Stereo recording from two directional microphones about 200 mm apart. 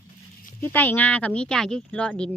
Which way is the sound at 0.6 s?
10° left (ahead or behind).